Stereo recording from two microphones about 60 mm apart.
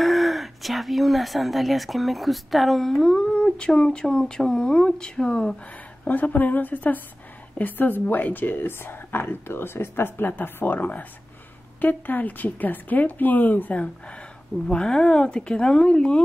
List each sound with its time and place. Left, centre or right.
0.0 s speech: centre
6.0 s speech: left